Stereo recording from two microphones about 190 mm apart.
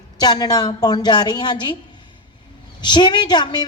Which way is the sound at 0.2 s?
20° left (ahead or behind).